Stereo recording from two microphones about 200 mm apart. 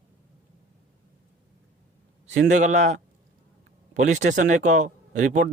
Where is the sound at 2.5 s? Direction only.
35° right (ahead or behind).